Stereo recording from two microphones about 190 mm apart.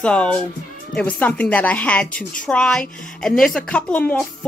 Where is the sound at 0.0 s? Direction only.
5° left (ahead or behind).